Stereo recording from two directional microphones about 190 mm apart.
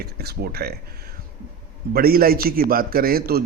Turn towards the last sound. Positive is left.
turn(degrees=-50)  # may be behind; listen again after turning